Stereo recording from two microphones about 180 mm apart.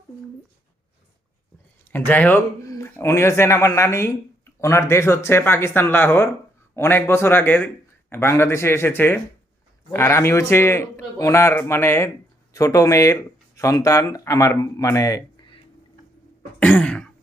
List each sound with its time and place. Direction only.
1.9 s speech: 10° left (ahead or behind)
16.6 s speech: 5° left (ahead or behind)